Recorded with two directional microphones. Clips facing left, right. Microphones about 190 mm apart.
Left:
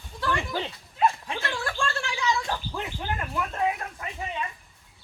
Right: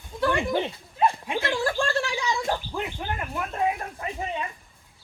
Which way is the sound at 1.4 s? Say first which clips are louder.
Right 5 dB; 35° right (ahead or behind).